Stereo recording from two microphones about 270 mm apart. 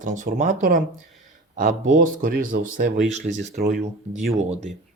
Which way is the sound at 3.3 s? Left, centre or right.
Right.